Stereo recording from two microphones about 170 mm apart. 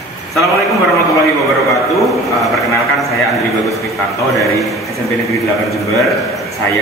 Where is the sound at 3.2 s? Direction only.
Centre (ahead or behind).